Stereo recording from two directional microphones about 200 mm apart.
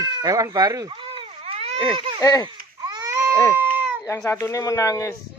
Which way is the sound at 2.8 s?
20° right (ahead or behind).